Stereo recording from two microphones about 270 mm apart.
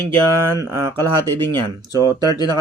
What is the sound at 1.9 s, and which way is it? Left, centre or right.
Speech, centre.